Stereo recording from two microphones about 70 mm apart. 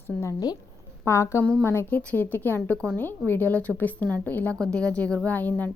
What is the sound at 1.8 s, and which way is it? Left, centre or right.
A woman's voice, left.